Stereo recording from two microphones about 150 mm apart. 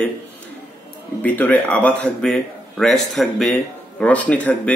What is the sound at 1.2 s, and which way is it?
Speech, 10° left (ahead or behind).